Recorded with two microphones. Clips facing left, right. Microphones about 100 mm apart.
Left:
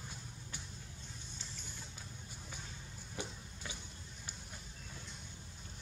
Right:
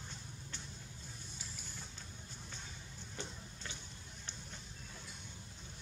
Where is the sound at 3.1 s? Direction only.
10° left (ahead or behind).